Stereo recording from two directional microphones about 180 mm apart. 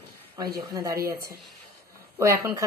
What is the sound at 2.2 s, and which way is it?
Speech, 15° right (ahead or behind).